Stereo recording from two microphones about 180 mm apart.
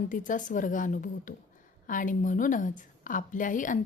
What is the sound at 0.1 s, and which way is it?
A woman's voice, 45° left (ahead or behind).